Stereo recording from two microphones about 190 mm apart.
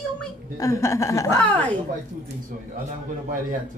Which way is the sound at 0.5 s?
15° left (ahead or behind).